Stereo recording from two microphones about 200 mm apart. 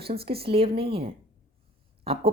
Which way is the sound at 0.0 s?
30° right (ahead or behind).